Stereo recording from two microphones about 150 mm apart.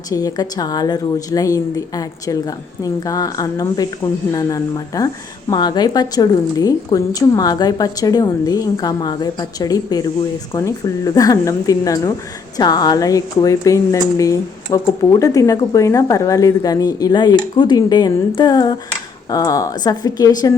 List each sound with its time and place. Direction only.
0.1 s a woman's voice: 25° left (ahead or behind)